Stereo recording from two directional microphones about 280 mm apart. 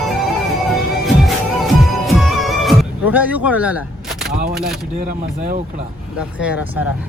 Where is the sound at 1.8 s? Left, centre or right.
Centre.